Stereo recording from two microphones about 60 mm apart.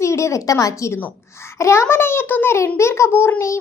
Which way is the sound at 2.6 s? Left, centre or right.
Left.